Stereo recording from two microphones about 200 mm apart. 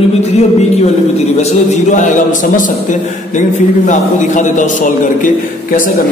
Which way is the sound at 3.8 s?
40° left (ahead or behind).